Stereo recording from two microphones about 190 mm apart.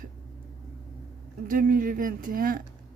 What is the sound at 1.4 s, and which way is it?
Speech, 45° right (ahead or behind).